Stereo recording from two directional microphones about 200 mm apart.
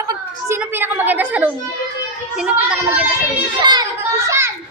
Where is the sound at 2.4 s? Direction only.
5° right (ahead or behind).